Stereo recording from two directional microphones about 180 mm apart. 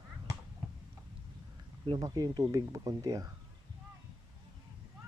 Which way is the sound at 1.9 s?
20° right (ahead or behind).